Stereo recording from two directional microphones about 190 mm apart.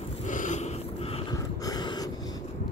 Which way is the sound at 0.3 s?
40° left (ahead or behind).